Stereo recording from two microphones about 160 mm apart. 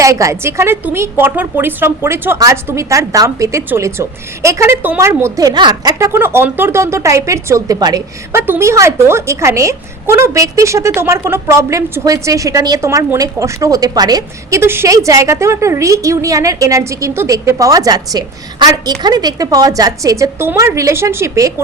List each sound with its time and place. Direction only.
0.0 s a woman's voice: 20° right (ahead or behind)